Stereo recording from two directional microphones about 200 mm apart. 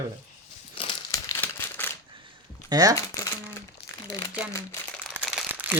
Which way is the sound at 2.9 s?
15° left (ahead or behind).